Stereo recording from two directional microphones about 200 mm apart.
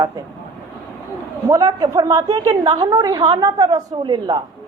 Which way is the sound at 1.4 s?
15° right (ahead or behind).